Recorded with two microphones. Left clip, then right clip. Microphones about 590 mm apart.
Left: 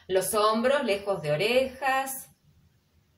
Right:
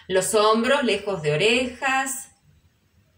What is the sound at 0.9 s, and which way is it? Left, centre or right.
Speech, left.